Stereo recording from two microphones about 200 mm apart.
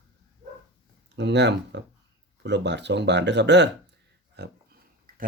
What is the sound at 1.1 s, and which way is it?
Speech, 60° right (ahead or behind).